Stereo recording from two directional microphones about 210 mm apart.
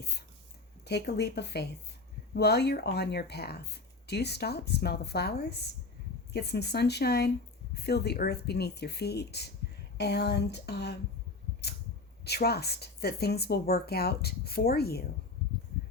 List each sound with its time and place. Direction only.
0.0 s a sound: 50° left (ahead or behind)
0.9 s speech: 50° left (ahead or behind)
12.2 s speech: 50° left (ahead or behind)